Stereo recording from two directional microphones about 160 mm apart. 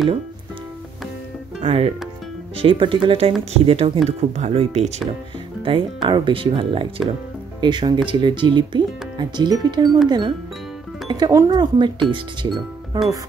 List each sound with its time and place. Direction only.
1.6 s speech: 35° right (ahead or behind)
5.6 s speech: 30° right (ahead or behind)